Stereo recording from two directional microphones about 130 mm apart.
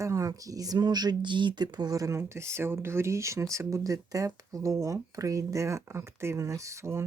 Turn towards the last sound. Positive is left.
turn(degrees=-20)  # may be behind; listen again after turning